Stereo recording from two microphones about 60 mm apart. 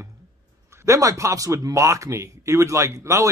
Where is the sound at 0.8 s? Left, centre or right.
Right.